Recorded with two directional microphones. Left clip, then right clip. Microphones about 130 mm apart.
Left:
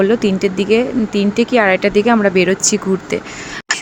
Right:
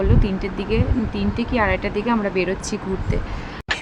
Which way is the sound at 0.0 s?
40° left (ahead or behind).